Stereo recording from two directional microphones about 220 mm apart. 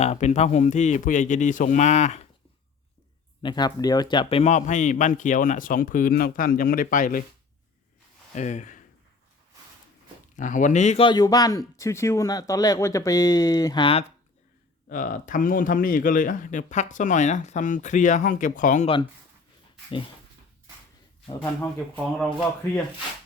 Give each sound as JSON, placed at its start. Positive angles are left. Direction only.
{"t": 0.0, "sound": "speech", "side_deg": 30}
{"t": 3.4, "sound": "speech", "side_deg": 20}
{"t": 8.4, "sound": "speech", "side_deg": 35}
{"t": 10.3, "sound": "speech", "side_deg": 35}
{"t": 14.8, "sound": "speech", "side_deg": 35}
{"t": 21.6, "sound": "speech", "side_deg": 5}